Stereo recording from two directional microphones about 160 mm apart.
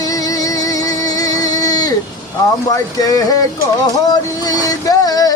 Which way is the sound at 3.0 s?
25° left (ahead or behind).